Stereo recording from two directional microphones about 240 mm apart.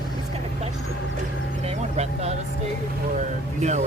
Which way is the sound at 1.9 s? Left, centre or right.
Right.